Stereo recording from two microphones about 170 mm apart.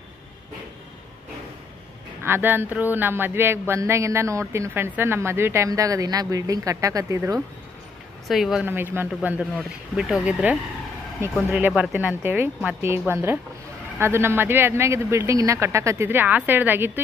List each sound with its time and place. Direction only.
2.2 s speech: 10° right (ahead or behind)
8.3 s speech: centre (ahead or behind)
11.6 s speech: 10° right (ahead or behind)